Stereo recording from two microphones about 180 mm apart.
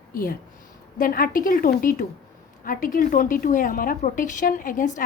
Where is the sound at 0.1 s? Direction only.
50° left (ahead or behind).